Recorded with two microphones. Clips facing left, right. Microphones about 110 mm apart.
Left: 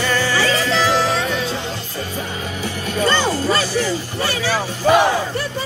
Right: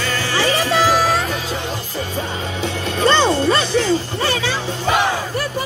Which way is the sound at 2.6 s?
25° right (ahead or behind).